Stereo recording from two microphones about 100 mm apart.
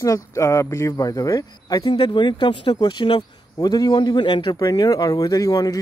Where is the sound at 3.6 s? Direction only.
40° left (ahead or behind).